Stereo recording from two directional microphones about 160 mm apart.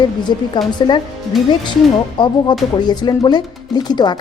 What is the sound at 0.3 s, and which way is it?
Speech, 30° left (ahead or behind).